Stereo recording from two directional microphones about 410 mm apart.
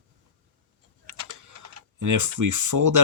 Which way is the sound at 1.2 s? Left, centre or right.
Right.